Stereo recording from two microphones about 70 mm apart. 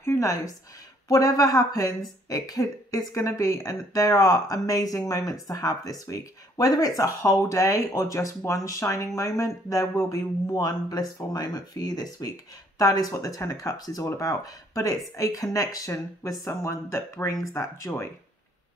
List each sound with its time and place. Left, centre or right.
0.0 s a woman's voice: left
14.0 s speech: left
15.9 s speech: left
17.9 s speech: left